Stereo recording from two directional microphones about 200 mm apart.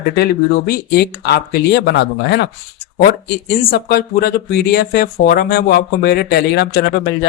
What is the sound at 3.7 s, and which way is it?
Speech, 50° left (ahead or behind).